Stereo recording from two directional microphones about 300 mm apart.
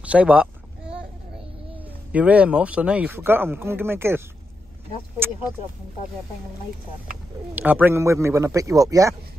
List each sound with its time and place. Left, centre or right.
0.0 s bleat: centre
2.1 s speech: centre
5.2 s speech: centre
7.5 s speech: centre